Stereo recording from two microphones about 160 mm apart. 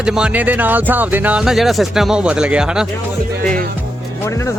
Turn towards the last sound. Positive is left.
turn(degrees=20)  # may be behind; listen again after turning